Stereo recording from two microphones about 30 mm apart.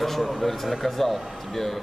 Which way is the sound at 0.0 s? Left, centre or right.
Centre.